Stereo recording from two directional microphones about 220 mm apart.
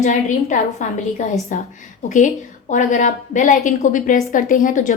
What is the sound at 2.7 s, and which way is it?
A woman's voice, 35° left (ahead or behind).